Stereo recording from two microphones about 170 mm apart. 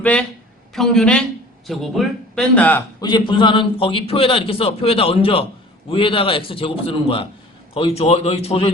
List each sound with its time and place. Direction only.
0.0 s a man's voice: 5° left (ahead or behind)
3.0 s a man's voice: 25° left (ahead or behind)